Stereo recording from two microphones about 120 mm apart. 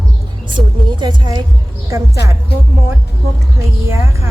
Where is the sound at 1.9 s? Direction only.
25° right (ahead or behind).